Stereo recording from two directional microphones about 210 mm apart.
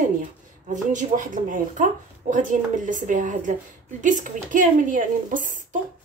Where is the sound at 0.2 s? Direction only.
35° right (ahead or behind).